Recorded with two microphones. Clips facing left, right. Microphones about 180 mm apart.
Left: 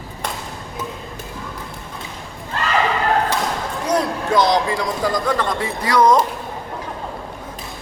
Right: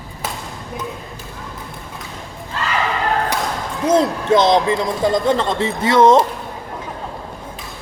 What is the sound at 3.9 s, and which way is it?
A man's voice, 25° right (ahead or behind).